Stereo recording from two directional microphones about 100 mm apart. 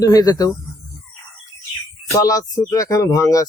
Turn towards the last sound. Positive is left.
turn(degrees=30)  # may be behind; listen again after turning